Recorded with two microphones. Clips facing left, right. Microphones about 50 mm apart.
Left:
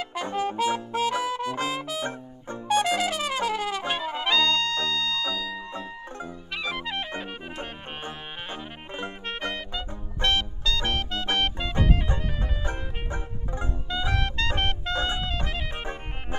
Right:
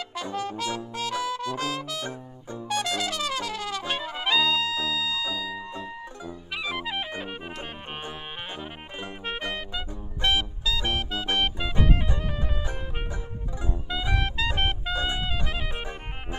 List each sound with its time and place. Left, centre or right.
0.1 s brass instrument: left
2.7 s trumpet: left
4.2 s trumpet: centre
6.5 s music: centre
9.2 s music: centre
12.6 s music: left
13.8 s music: centre